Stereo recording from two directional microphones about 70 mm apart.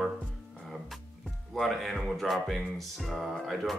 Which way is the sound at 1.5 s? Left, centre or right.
Centre.